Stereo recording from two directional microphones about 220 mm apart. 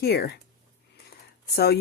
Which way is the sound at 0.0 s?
45° left (ahead or behind).